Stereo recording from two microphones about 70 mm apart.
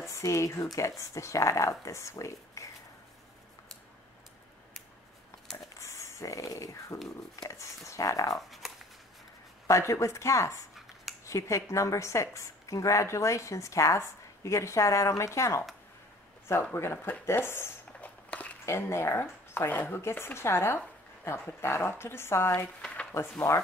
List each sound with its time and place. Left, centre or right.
0.1 s a woman's voice: left
5.8 s a sound: left
8.4 s shuffling cards: centre
9.7 s a woman's voice: left
16.7 s speech: left
18.0 s a sound: left
18.7 s speech: left
22.8 s a sound: centre
23.5 s a woman's voice: left